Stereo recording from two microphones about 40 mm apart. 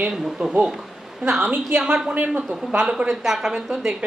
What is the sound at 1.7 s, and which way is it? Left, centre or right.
Speech, right.